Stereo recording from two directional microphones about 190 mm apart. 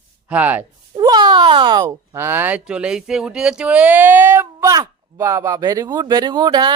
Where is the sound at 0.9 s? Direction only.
20° right (ahead or behind).